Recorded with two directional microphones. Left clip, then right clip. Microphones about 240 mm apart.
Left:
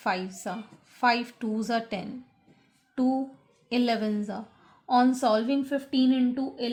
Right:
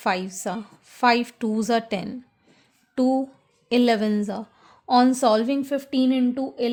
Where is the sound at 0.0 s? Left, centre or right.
Right.